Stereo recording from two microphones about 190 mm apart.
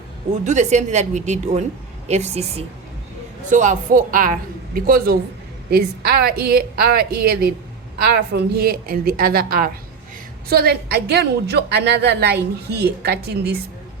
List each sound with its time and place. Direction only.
0.4 s a woman's voice: 40° right (ahead or behind); by 13.6 s 60° right (ahead or behind)